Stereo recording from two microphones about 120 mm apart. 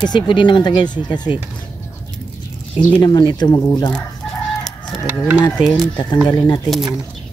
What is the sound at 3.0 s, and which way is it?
Speech, 35° left (ahead or behind).